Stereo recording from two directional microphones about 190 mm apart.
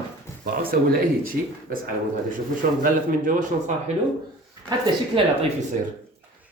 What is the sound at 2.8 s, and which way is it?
Speech, 45° right (ahead or behind).